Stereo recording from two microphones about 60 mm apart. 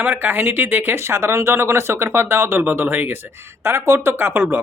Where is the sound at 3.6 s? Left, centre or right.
Right.